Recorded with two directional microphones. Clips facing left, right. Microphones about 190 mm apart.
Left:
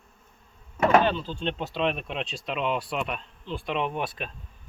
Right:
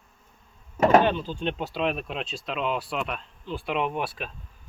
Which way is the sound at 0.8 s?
40° right (ahead or behind).